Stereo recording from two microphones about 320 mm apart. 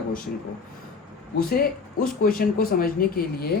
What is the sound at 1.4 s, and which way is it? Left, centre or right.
Speech, left.